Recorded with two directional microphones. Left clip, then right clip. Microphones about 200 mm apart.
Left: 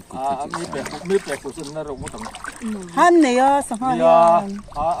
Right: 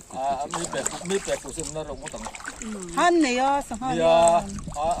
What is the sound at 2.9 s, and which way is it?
Speech, 30° left (ahead or behind).